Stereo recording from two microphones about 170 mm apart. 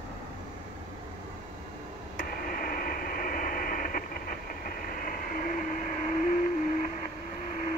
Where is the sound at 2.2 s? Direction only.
55° left (ahead or behind).